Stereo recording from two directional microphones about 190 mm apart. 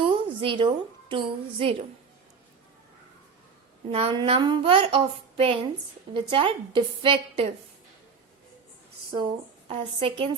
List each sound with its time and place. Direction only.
0.0 s a woman's voice: 25° right (ahead or behind)
3.9 s speech: 30° right (ahead or behind)
9.1 s speech: 25° right (ahead or behind)